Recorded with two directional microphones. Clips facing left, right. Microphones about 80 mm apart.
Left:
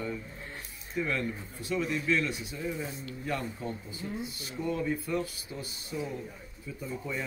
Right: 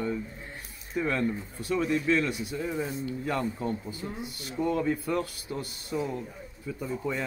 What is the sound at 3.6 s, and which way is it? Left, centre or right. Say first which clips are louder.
Speech: right 5 dB; right.